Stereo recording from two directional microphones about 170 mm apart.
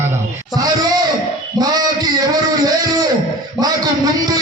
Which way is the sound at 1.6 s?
25° right (ahead or behind).